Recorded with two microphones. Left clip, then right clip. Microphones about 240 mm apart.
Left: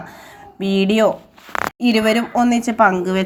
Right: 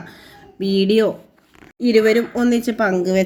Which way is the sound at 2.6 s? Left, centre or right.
Centre.